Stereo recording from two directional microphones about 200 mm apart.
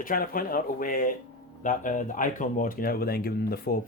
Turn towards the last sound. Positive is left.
turn(degrees=50)  # may be behind; listen again after turning